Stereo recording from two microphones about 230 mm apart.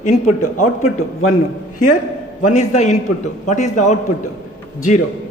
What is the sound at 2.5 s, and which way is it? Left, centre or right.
A man's voice, left.